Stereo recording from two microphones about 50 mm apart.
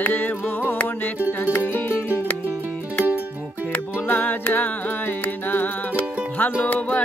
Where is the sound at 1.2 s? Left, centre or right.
Right.